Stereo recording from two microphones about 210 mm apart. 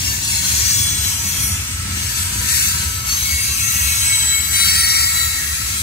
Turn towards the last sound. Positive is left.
turn(degrees=50)  # may be behind; listen again after turning